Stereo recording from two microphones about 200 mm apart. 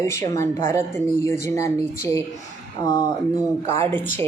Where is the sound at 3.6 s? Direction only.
10° left (ahead or behind).